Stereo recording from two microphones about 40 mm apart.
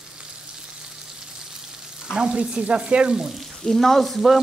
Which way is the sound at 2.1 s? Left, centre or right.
Right.